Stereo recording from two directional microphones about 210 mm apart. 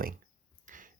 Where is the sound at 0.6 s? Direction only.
40° right (ahead or behind).